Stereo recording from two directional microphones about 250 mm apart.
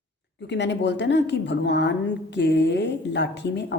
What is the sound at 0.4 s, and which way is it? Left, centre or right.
A woman's voice, left.